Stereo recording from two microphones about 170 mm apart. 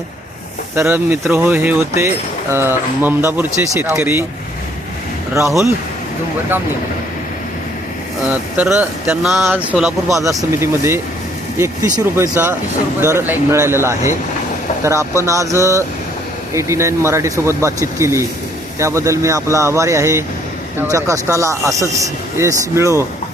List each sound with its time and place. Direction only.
0.8 s speech: 15° right (ahead or behind)
5.3 s speech: 20° right (ahead or behind)
8.3 s speech: 10° right (ahead or behind)
10.2 s speech: 15° right (ahead or behind)